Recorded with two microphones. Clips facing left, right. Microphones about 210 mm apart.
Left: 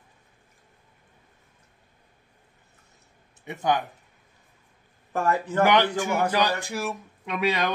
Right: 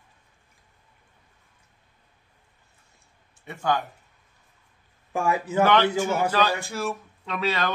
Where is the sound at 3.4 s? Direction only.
20° left (ahead or behind).